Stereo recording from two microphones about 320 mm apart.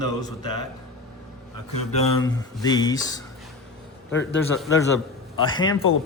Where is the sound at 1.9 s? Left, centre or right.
Centre.